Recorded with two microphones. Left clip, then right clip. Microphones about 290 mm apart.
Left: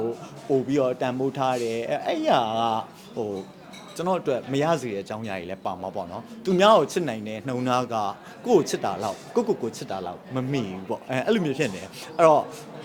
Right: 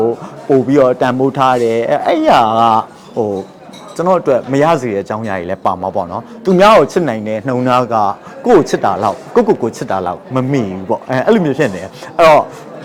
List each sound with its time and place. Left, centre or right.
0.7 s speech: right